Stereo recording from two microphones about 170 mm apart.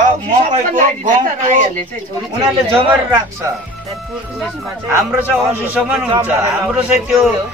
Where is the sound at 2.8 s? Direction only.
25° right (ahead or behind).